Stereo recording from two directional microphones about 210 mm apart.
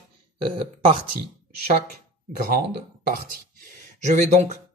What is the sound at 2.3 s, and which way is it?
Speech, 45° right (ahead or behind).